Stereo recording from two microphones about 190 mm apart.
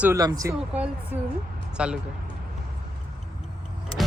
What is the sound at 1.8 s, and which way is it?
Speech, 5° right (ahead or behind).